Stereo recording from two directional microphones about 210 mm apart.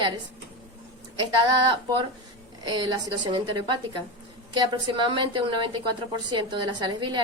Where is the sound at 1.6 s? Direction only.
25° right (ahead or behind).